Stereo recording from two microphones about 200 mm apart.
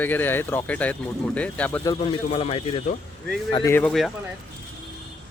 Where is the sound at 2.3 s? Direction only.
30° left (ahead or behind).